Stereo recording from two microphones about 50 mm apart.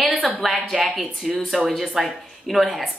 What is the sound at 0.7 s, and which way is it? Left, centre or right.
Speech, centre.